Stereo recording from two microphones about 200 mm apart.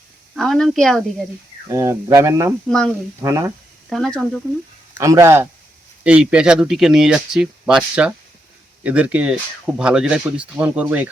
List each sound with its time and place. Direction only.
0.3 s speech: centre (ahead or behind)
1.7 s speech: 15° right (ahead or behind)
2.6 s speech: 5° left (ahead or behind)
3.2 s speech: 15° right (ahead or behind)
3.8 s speech: centre (ahead or behind)
4.9 s speech: 15° right (ahead or behind)